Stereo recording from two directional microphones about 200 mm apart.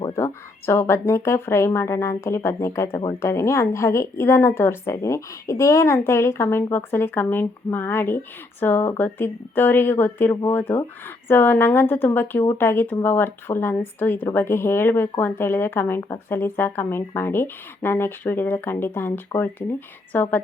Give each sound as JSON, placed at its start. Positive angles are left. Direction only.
{"t": 0.0, "sound": "speech", "side_deg": 15}